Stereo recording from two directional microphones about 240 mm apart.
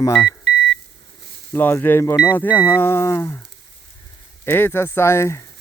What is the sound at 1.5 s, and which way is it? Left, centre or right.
Speech, centre.